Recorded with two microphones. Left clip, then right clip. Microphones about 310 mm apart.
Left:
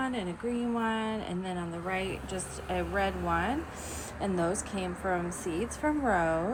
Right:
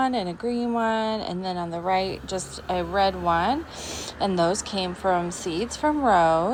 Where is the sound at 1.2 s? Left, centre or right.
Right.